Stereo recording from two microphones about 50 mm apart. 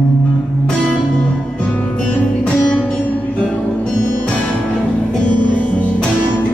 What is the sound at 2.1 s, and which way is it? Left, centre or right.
Music, left.